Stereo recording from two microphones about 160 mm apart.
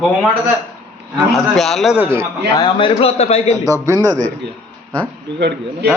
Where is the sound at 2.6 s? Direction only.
30° left (ahead or behind).